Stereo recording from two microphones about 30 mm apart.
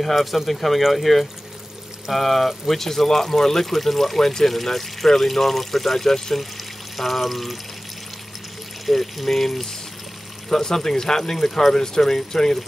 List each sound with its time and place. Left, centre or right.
0.1 s speech: centre
8.8 s speech: centre
12.0 s speech: centre